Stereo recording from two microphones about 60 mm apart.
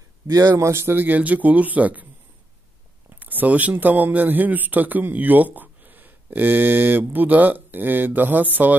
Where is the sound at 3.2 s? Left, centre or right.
Right.